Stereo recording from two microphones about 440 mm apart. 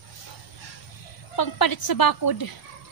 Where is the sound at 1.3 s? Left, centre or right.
Left.